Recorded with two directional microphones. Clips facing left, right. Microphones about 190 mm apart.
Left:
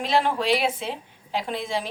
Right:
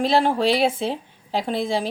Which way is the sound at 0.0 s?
35° right (ahead or behind).